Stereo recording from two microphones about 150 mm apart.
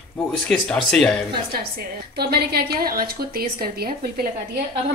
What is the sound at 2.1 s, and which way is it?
A woman's voice, 90° right.